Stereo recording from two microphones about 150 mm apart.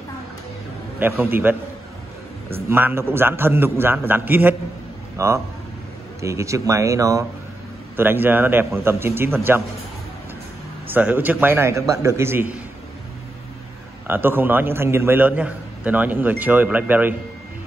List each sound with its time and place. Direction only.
0.9 s a man's voice: 15° right (ahead or behind)
10.9 s a man's voice: 10° right (ahead or behind)
14.0 s a man's voice: 15° right (ahead or behind)